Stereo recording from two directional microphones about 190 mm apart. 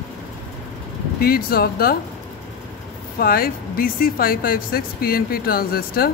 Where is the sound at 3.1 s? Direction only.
50° left (ahead or behind).